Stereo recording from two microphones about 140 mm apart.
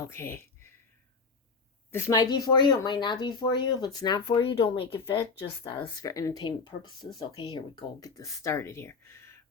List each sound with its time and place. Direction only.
0.1 s speech: 20° left (ahead or behind)
1.9 s speech: 20° left (ahead or behind)